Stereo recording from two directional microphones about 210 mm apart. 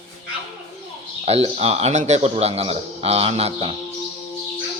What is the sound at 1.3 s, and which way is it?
Speech, 30° right (ahead or behind).